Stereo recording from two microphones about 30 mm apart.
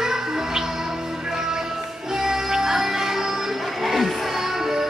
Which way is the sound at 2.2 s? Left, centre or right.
Centre.